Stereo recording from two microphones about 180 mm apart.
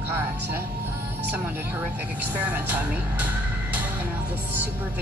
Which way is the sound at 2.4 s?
10° right (ahead or behind).